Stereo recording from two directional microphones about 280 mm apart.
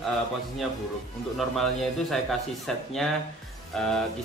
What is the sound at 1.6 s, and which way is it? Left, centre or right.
Speech, centre.